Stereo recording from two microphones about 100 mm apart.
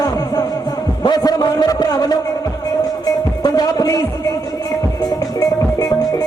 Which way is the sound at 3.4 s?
40° left (ahead or behind).